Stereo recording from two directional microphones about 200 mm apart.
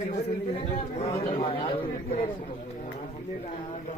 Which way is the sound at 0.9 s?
30° left (ahead or behind).